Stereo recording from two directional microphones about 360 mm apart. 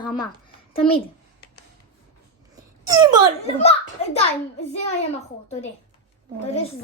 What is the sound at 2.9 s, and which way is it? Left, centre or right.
Speech, centre.